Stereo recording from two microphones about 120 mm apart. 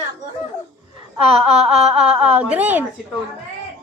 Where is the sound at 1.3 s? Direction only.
60° right (ahead or behind).